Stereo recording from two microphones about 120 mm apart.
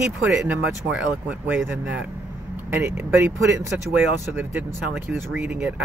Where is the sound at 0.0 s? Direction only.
10° right (ahead or behind).